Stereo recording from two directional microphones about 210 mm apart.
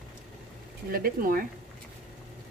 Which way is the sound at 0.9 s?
45° right (ahead or behind).